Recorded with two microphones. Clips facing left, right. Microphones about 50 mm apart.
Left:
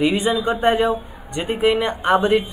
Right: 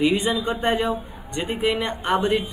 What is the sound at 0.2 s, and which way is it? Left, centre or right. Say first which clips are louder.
A man's voice: left 5 dB; centre.